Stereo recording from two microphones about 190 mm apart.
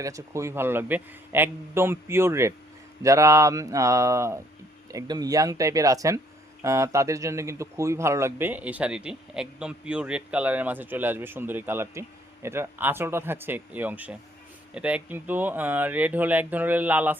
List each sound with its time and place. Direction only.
0.0 s speech: 15° right (ahead or behind)